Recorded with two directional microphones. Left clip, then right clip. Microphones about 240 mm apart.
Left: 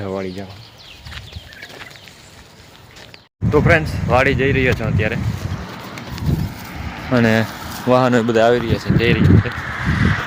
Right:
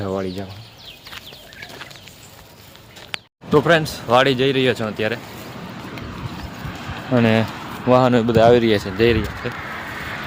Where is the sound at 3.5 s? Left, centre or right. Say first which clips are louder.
Even; centre.